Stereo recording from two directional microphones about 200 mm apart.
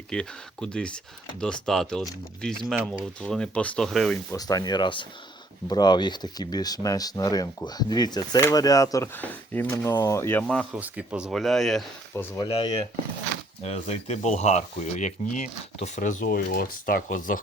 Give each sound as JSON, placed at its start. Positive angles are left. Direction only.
{"t": 0.1, "sound": "speech", "side_deg": 5}
{"t": 4.3, "sound": "speech", "side_deg": 20}
{"t": 12.1, "sound": "speech", "side_deg": 15}
{"t": 12.5, "sound": "speech", "side_deg": 30}